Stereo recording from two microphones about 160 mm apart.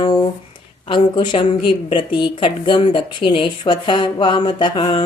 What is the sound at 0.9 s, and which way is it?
Speech, 30° left (ahead or behind).